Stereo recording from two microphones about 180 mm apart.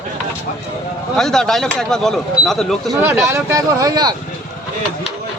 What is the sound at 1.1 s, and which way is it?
Speech, centre (ahead or behind).